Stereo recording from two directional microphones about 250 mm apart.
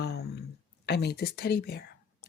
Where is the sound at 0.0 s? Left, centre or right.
Left.